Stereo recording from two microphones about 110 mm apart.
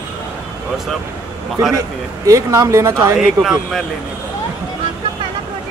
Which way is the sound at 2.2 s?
30° right (ahead or behind).